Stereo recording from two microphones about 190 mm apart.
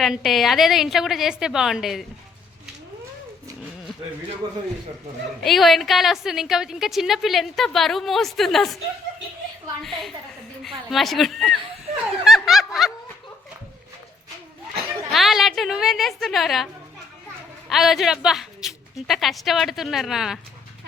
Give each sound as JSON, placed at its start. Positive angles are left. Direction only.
{"t": 0.0, "sound": "a woman's voice", "side_deg": 0}
{"t": 4.4, "sound": "speech", "side_deg": -20}
{"t": 5.4, "sound": "a woman's voice", "side_deg": 0}
{"t": 9.8, "sound": "a woman's voice", "side_deg": 0}
{"t": 12.2, "sound": "snicker", "side_deg": 0}
{"t": 15.1, "sound": "a woman's voice", "side_deg": 0}
{"t": 17.7, "sound": "a woman's voice", "side_deg": 0}